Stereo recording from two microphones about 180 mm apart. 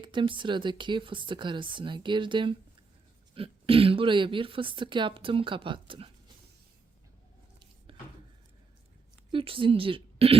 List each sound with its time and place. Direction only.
0.0 s speech: 25° right (ahead or behind)
7.9 s a sound: 30° right (ahead or behind)
9.3 s a woman's voice: 30° right (ahead or behind)